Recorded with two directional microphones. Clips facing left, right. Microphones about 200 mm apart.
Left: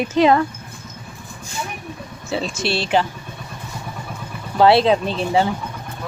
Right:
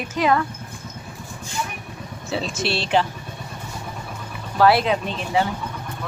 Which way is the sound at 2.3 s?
Centre (ahead or behind).